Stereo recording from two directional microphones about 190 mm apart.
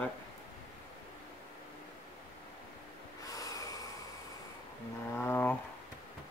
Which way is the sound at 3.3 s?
20° left (ahead or behind).